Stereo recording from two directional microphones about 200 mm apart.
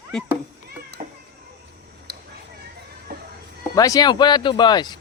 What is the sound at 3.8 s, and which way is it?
Speech, 20° left (ahead or behind).